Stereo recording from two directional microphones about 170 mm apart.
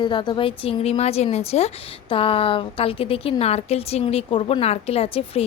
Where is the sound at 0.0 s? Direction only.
25° left (ahead or behind).